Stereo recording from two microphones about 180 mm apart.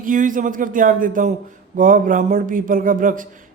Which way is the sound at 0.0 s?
45° right (ahead or behind).